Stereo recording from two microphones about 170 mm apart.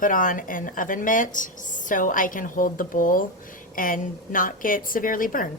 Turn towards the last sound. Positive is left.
turn(degrees=55)  # may be behind; listen again after turning